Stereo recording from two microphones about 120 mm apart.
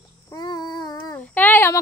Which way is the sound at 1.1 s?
15° left (ahead or behind).